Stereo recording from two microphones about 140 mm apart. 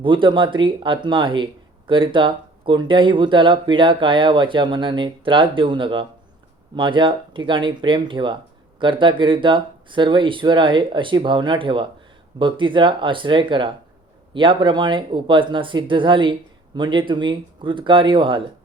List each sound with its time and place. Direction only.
0.0 s speech: 35° right (ahead or behind)